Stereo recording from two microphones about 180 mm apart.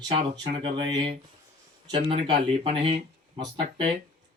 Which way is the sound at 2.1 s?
30° right (ahead or behind).